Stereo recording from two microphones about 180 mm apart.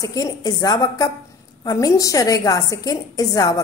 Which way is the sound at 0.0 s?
20° left (ahead or behind).